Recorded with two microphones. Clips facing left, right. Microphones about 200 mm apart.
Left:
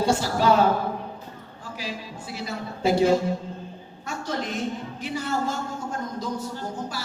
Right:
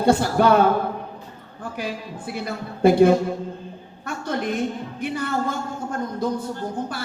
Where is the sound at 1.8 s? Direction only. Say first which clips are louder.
Right 4 dB; 55° right (ahead or behind).